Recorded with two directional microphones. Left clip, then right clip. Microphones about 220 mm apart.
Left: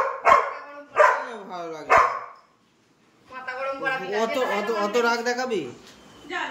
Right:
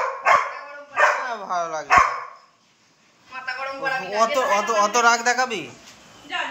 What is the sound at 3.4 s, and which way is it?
Speech, 10° left (ahead or behind).